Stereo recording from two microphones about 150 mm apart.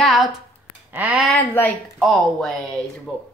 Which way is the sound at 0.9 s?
10° right (ahead or behind).